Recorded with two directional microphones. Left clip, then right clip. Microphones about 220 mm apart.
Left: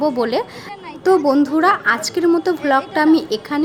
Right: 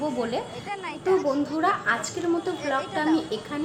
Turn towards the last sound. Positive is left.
turn(degrees=50)  # may be behind; listen again after turning